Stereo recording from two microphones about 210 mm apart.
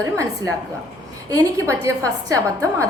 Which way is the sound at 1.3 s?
15° right (ahead or behind).